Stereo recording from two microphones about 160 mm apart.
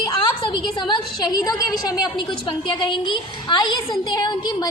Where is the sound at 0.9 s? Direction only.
25° left (ahead or behind).